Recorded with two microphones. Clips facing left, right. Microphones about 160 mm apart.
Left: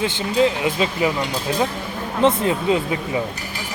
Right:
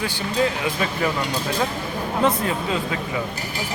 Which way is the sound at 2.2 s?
20° left (ahead or behind).